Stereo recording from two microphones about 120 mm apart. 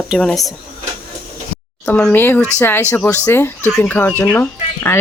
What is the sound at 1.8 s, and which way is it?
Speech, 10° left (ahead or behind).